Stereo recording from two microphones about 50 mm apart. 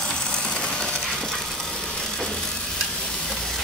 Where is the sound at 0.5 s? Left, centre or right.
Centre.